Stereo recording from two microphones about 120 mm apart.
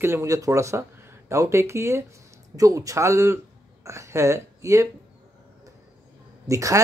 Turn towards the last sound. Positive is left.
turn(degrees=-25)  # may be behind; listen again after turning